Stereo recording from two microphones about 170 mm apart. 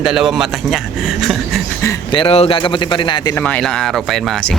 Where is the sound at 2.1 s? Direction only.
30° left (ahead or behind).